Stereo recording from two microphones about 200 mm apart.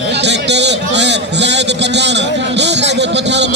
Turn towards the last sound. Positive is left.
turn(degrees=-60)  # may be behind; listen again after turning